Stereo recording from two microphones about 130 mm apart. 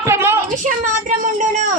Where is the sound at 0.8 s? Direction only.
80° right.